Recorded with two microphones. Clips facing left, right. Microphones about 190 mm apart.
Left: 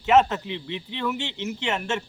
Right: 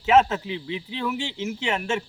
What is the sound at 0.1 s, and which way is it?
A man's voice, 5° right (ahead or behind).